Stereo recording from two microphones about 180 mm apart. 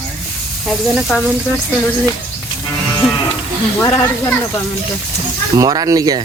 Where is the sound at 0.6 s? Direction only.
Centre (ahead or behind).